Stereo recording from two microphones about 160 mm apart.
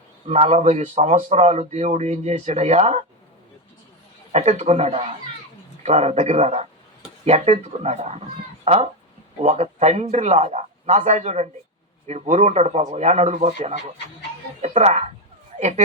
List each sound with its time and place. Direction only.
0.3 s speech: 40° right (ahead or behind)
4.3 s speech: 40° right (ahead or behind)